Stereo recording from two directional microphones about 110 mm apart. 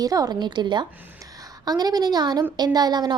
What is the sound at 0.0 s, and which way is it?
A woman's voice, 35° right (ahead or behind).